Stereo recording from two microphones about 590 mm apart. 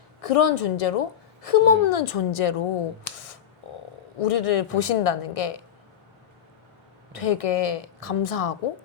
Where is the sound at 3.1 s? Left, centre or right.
Left.